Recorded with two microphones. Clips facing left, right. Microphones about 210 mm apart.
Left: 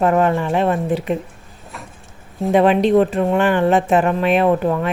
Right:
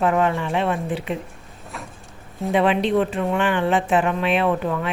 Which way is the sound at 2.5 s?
45° left (ahead or behind).